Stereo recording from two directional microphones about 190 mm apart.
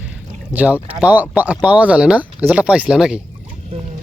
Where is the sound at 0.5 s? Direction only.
10° right (ahead or behind).